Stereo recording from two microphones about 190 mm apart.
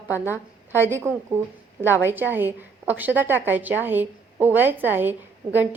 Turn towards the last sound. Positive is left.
turn(degrees=-10)  # may be behind; listen again after turning